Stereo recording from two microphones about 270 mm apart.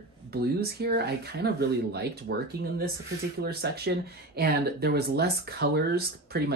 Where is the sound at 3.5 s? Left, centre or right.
Right.